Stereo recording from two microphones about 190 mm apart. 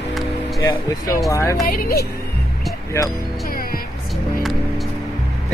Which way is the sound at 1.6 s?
55° left (ahead or behind).